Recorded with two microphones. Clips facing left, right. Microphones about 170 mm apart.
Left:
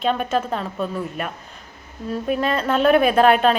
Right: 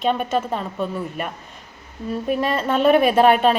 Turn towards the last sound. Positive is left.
turn(degrees=-5)  # may be behind; listen again after turning